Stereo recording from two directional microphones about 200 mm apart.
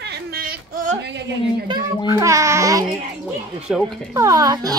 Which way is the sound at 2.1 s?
15° right (ahead or behind).